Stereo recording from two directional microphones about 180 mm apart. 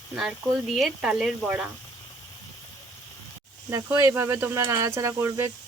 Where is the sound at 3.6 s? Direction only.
15° right (ahead or behind).